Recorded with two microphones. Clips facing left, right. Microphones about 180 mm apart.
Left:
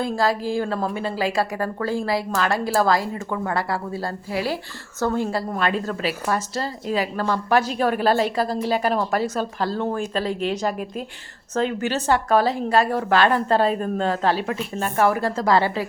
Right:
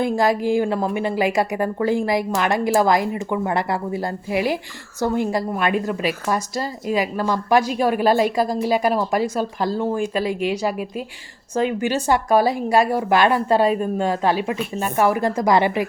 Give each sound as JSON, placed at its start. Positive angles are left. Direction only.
{"t": 0.0, "sound": "a woman's voice", "side_deg": -20}